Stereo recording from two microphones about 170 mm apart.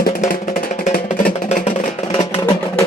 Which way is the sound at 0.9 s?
60° left (ahead or behind).